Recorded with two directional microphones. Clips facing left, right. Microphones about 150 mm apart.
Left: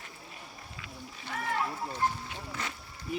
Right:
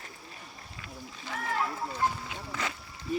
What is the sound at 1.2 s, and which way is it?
Splash, 5° right (ahead or behind).